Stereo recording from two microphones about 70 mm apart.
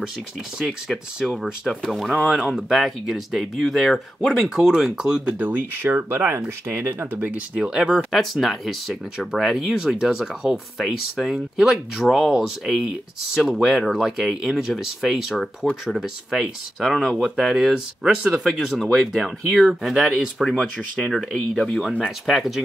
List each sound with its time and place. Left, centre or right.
0.6 s speech: centre; by 5.9 s right
5.9 s speech: right
7.2 s speech: centre
8.1 s speech: centre